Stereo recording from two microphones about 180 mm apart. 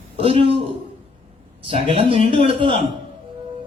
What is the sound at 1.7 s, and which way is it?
A man's voice, 30° right (ahead or behind).